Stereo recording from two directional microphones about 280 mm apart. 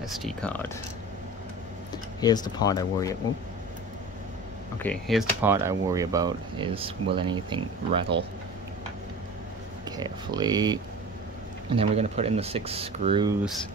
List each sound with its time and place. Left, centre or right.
0.0 s speech: centre
2.1 s speech: centre
4.8 s speech: centre
9.8 s speech: centre